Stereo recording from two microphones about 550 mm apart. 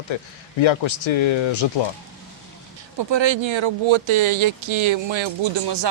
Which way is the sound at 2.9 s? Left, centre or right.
Right.